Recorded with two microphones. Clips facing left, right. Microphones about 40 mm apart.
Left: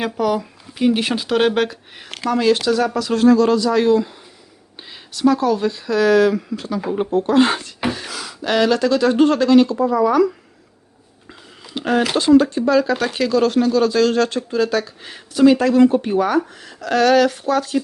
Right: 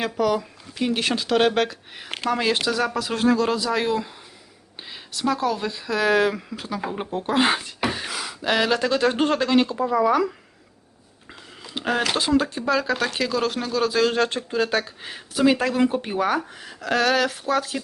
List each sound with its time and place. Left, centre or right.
0.0 s speech: centre
2.2 s speech: centre
2.6 s speech: centre
3.0 s speech: centre
5.1 s speech: centre
6.1 s speech: centre
11.6 s speech: centre
14.3 s speech: right
15.0 s speech: centre